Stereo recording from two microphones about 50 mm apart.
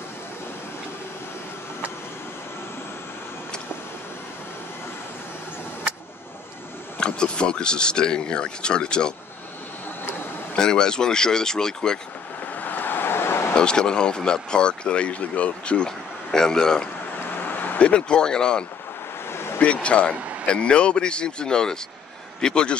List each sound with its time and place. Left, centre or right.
7.0 s speech: centre
10.5 s speech: centre
12.5 s vehicle: left
13.6 s speech: centre
17.4 s vehicle: left
17.7 s speech: left